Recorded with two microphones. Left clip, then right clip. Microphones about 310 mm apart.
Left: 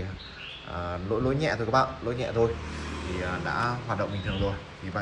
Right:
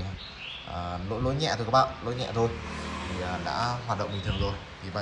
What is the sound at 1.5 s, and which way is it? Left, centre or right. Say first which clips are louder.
Speech: right 3 dB; centre.